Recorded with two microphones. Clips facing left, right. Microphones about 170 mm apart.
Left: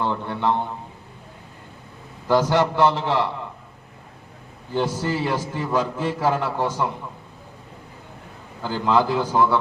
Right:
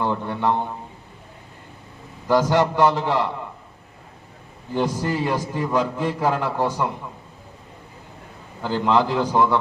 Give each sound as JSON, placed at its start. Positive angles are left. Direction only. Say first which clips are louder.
{"t": 0.0, "sound": "a sound", "louder": "right 1 dB", "side_deg": -15}
{"t": 2.2, "sound": "a man's voice", "louder": "right 1 dB", "side_deg": -15}
{"t": 4.7, "sound": "a man's voice", "louder": "right 1 dB", "side_deg": -15}
{"t": 8.8, "sound": "a man's voice", "louder": "even", "side_deg": -15}